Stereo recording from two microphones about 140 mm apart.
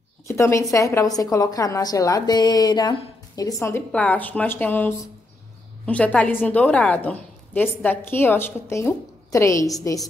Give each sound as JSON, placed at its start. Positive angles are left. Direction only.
{"t": 0.3, "sound": "a woman's voice", "side_deg": 20}
{"t": 3.9, "sound": "a woman's voice", "side_deg": 10}